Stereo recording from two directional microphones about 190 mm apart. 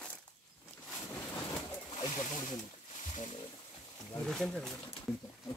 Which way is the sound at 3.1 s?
35° left (ahead or behind).